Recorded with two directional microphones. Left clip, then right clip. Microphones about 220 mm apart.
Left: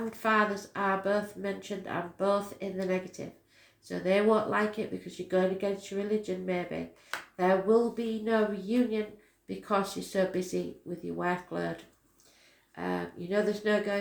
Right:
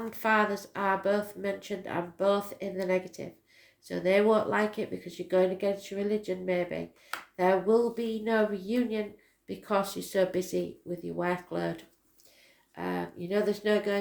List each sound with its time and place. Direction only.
0.1 s speech: 40° right (ahead or behind)
12.7 s speech: 40° right (ahead or behind)